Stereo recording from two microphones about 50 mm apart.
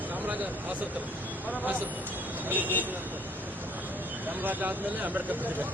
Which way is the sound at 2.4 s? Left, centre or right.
Right.